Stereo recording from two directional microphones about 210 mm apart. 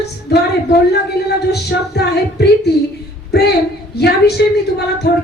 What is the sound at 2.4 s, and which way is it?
A man's voice, 50° left (ahead or behind).